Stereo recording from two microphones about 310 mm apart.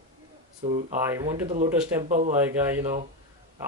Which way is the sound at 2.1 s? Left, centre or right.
Right.